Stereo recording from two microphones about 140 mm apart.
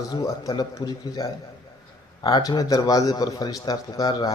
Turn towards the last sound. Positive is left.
turn(degrees=30)  # may be behind; listen again after turning